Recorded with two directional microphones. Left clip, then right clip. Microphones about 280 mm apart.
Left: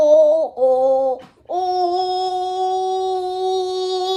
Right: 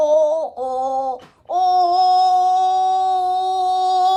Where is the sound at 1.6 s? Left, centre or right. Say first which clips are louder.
Right 5 dB; right.